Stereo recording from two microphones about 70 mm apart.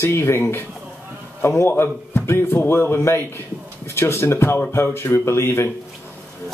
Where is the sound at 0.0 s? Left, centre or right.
Left.